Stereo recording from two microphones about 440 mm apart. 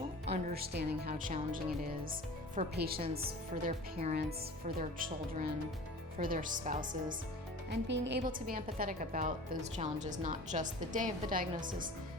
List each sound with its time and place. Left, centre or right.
0.3 s a woman's voice: right